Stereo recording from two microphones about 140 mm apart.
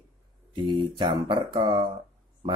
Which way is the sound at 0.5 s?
35° right (ahead or behind).